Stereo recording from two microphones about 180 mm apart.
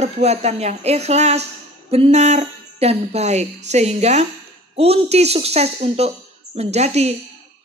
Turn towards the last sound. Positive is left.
turn(degrees=-35)  # may be behind; listen again after turning